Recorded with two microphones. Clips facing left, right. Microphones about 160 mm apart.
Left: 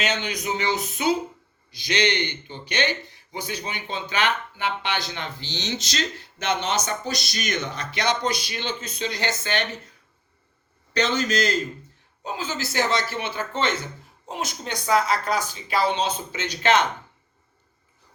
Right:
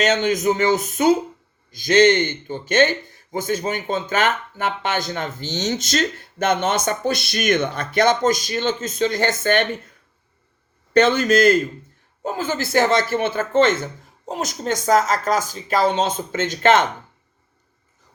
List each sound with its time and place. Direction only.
0.0 s speech: 45° right (ahead or behind)
10.9 s speech: 55° right (ahead or behind)